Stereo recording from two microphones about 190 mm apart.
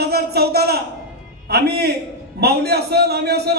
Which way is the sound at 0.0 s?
55° right (ahead or behind).